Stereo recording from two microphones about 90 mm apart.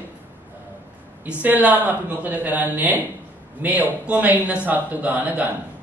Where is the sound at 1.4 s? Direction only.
20° right (ahead or behind).